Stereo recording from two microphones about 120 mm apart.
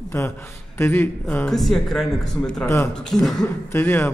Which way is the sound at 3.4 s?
15° left (ahead or behind).